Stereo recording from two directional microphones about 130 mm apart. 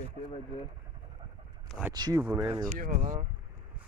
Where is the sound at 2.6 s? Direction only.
75° right (ahead or behind).